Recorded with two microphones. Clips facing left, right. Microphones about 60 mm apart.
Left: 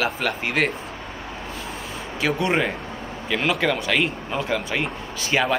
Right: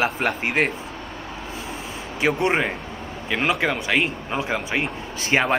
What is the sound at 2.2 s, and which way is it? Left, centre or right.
Speech, right.